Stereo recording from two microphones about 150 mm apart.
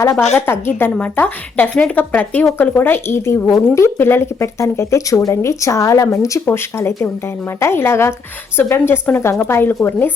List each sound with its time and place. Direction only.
0.0 s a woman's voice: 20° left (ahead or behind)